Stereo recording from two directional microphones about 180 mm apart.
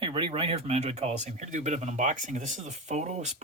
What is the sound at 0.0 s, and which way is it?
Speech, 30° right (ahead or behind).